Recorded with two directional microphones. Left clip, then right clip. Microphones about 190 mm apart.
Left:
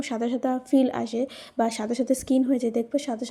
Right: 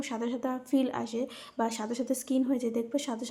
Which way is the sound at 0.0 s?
25° left (ahead or behind).